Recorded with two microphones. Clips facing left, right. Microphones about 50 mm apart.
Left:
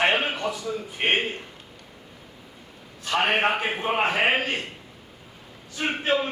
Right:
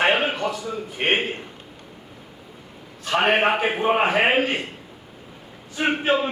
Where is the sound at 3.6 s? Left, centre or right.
Right.